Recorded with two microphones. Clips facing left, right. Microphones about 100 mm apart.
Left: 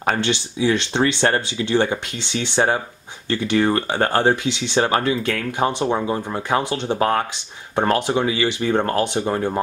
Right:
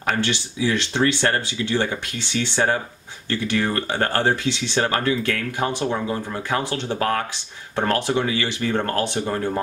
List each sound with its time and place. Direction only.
0.0 s speech: 20° left (ahead or behind)